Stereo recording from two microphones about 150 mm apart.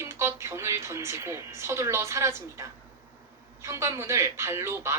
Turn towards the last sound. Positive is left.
turn(degrees=-20)  # may be behind; listen again after turning